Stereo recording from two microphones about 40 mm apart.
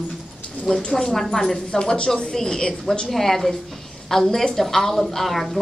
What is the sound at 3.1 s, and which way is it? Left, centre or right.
A woman's voice, centre.